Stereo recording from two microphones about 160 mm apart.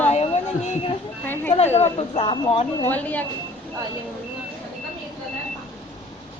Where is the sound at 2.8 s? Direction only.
10° left (ahead or behind).